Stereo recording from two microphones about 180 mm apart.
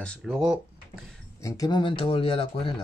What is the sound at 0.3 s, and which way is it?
Speech, 5° right (ahead or behind).